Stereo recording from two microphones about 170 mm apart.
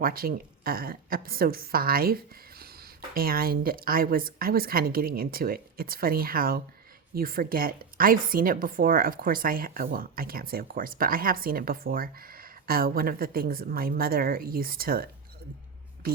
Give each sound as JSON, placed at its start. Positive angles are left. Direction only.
{"t": 0.0, "sound": "a woman's voice", "side_deg": -60}